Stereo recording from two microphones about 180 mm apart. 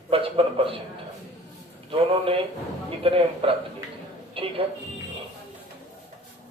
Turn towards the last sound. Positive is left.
turn(degrees=-30)  # may be behind; listen again after turning